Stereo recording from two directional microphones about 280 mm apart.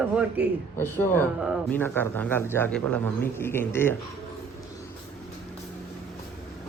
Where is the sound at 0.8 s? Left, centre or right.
Centre.